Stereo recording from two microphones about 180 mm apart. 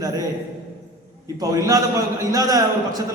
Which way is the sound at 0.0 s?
20° right (ahead or behind).